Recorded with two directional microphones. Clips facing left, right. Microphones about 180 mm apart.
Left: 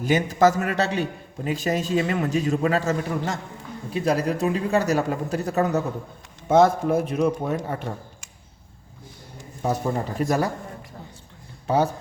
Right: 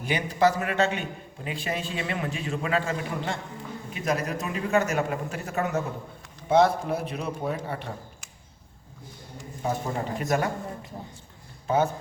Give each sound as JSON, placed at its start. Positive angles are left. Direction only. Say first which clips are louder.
{"t": 0.0, "sound": "a man's voice", "louder": "left 5 dB", "side_deg": 45}
{"t": 9.6, "sound": "a man's voice", "louder": "left 4 dB", "side_deg": 40}
{"t": 11.7, "sound": "a man's voice", "louder": "left 2 dB", "side_deg": 35}